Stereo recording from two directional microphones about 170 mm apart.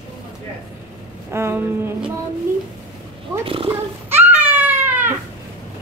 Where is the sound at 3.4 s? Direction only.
30° right (ahead or behind).